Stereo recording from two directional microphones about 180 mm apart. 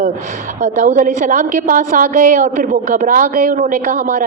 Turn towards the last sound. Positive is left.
turn(degrees=-50)  # may be behind; listen again after turning